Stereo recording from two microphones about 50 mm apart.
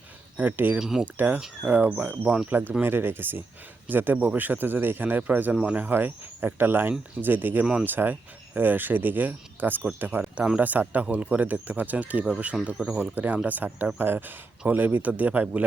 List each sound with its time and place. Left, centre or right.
0.3 s speech: right
0.8 s speech: centre
1.0 s speech: right
7.6 s speech: centre
7.9 s speech: right